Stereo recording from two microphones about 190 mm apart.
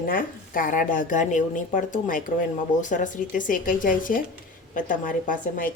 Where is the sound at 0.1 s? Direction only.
45° left (ahead or behind).